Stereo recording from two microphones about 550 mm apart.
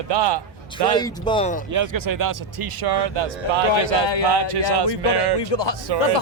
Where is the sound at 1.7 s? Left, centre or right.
Right.